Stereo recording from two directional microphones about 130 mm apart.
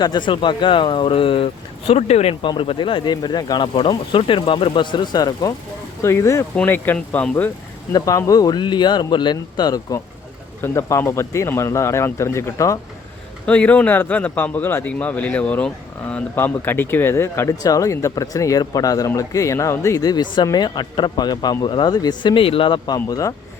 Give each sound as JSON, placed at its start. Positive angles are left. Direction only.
{"t": 0.0, "sound": "speech", "side_deg": 35}
{"t": 1.9, "sound": "speech", "side_deg": 55}
{"t": 2.5, "sound": "a man's voice", "side_deg": 40}
{"t": 7.9, "sound": "speech", "side_deg": 30}
{"t": 13.4, "sound": "a man's voice", "side_deg": 10}
{"t": 23.0, "sound": "speech", "side_deg": 25}